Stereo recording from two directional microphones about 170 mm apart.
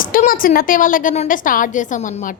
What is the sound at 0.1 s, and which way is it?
A woman's voice, 55° left (ahead or behind).